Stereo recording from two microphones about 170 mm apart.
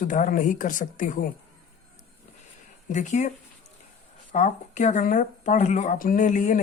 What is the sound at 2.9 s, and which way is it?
Speech, 45° left (ahead or behind).